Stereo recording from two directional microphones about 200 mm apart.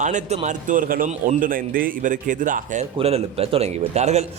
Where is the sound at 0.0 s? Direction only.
35° right (ahead or behind).